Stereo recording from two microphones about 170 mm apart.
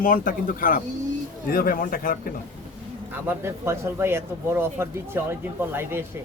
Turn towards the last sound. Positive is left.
turn(degrees=-15)  # may be behind; listen again after turning